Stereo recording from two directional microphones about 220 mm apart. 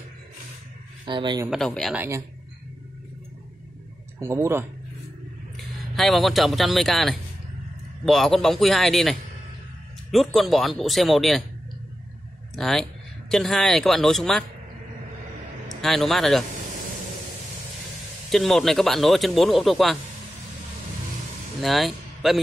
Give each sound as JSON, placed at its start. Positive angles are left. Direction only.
{"t": 1.0, "sound": "speech", "side_deg": -20}
{"t": 1.5, "sound": "speech", "side_deg": 0}
{"t": 4.2, "sound": "speech", "side_deg": -10}
{"t": 5.9, "sound": "speech", "side_deg": 0}
{"t": 10.1, "sound": "speech", "side_deg": 0}
{"t": 12.5, "sound": "speech", "side_deg": 0}
{"t": 15.8, "sound": "speech", "side_deg": 0}
{"t": 18.3, "sound": "speech", "side_deg": 0}
{"t": 21.5, "sound": "a man's voice", "side_deg": 0}